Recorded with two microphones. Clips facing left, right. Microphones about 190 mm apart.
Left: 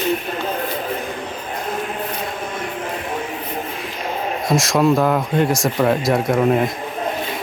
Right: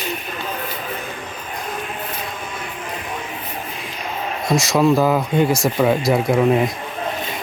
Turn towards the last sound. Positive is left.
turn(degrees=0)  # may be behind; listen again after turning